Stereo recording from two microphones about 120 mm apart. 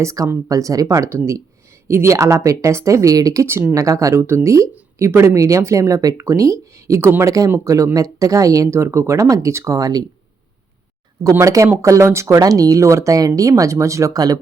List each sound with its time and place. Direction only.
0.0 s speech: 25° right (ahead or behind)
11.2 s speech: 30° right (ahead or behind)